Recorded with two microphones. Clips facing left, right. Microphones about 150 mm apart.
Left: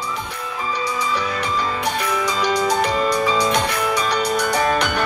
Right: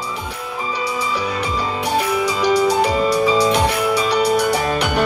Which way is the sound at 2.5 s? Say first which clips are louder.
Right 4 dB; 10° right (ahead or behind).